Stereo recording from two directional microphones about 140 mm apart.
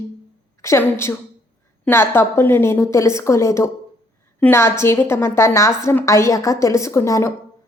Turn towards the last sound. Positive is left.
turn(degrees=20)  # may be behind; listen again after turning